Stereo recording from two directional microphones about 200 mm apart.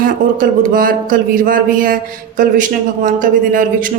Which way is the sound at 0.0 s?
45° right (ahead or behind).